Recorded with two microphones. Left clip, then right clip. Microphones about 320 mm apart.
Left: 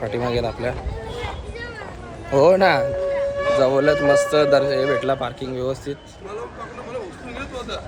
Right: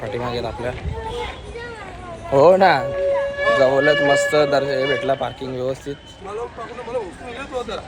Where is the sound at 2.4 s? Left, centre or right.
Centre.